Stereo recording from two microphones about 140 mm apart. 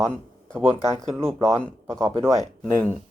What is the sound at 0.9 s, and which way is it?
Speech, 20° right (ahead or behind).